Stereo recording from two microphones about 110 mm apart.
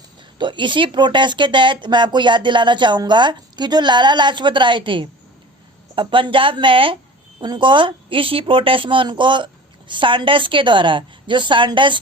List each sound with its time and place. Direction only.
0.3 s speech: 45° right (ahead or behind)